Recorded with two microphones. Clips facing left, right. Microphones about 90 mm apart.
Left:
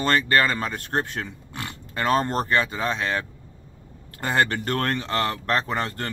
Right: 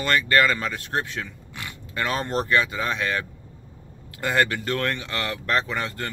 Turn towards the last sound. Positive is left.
turn(degrees=45)  # may be behind; listen again after turning